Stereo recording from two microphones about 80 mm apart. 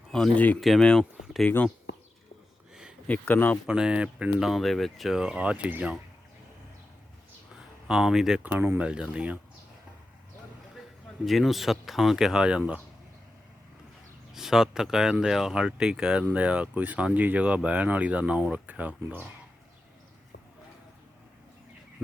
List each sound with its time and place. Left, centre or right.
0.3 s speech: centre
0.6 s speech: centre
1.2 s a sound: centre
1.5 s speech: centre
3.1 s speech: left
3.7 s speech: centre
4.4 s speech: centre
7.9 s speech: centre
8.4 s speech: right
8.8 s speech: centre
11.3 s speech: centre
14.3 s speech: centre